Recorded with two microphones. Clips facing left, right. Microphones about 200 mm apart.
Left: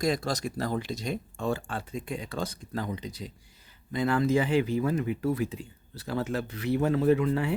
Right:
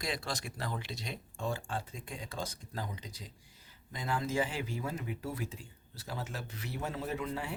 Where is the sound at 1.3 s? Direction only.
65° left (ahead or behind).